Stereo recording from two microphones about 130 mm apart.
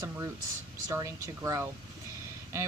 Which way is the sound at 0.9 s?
25° right (ahead or behind).